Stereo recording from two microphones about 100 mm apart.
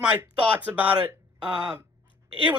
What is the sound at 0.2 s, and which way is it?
Speech, 20° right (ahead or behind).